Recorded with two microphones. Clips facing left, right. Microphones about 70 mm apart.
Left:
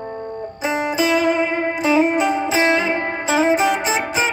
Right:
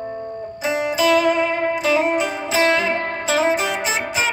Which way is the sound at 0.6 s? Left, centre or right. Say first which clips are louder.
Even; left.